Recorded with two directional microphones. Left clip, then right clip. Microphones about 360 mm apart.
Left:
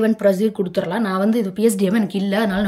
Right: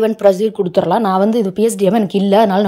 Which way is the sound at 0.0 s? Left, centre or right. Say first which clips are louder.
Right 5 dB; centre.